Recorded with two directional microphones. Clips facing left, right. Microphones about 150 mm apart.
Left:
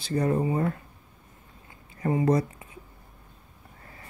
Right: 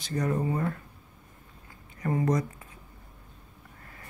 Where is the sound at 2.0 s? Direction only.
25° left (ahead or behind).